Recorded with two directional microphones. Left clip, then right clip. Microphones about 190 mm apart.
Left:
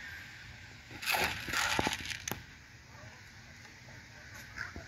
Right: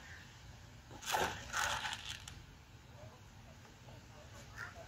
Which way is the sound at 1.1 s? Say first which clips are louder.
Left 5 dB; 45° left (ahead or behind).